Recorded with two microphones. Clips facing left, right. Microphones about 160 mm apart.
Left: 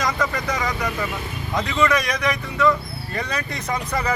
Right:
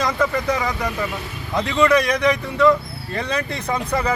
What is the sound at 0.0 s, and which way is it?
Speech, 30° right (ahead or behind).